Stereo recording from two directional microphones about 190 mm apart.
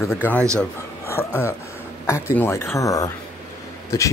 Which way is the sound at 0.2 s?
10° left (ahead or behind).